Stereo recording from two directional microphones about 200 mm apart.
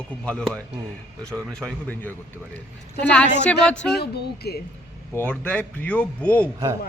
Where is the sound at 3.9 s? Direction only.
55° left (ahead or behind).